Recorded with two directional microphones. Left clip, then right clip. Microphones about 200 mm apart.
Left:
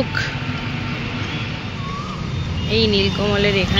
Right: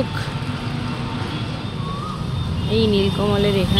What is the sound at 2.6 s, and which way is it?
Speech, 15° right (ahead or behind).